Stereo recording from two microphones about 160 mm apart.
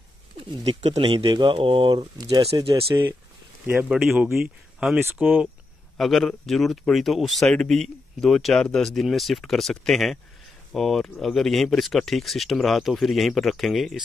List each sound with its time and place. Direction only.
0.7 s speech: 40° right (ahead or behind)
4.7 s speech: 5° right (ahead or behind)